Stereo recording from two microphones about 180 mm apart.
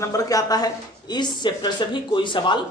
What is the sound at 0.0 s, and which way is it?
Speech, 20° left (ahead or behind).